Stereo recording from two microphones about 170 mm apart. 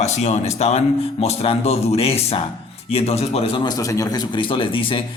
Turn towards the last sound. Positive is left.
turn(degrees=30)  # may be behind; listen again after turning